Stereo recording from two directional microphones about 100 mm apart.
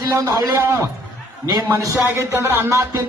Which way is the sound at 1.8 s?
30° right (ahead or behind).